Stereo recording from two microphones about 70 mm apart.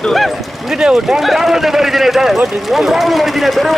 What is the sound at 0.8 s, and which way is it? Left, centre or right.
Speech, centre.